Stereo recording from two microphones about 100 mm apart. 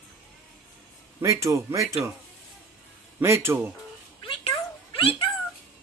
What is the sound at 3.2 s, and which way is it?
Speech, 25° right (ahead or behind).